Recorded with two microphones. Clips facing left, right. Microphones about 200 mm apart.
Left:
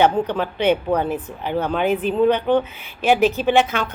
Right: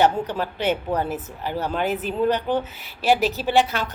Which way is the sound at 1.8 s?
40° right (ahead or behind).